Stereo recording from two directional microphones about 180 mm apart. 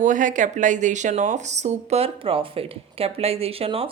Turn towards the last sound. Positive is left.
turn(degrees=-30)  # may be behind; listen again after turning